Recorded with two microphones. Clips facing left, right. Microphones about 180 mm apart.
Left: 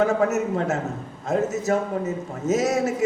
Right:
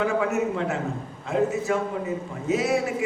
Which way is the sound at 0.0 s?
40° left (ahead or behind).